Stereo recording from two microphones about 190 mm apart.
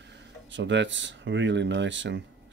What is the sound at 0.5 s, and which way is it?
Speech, 75° right (ahead or behind).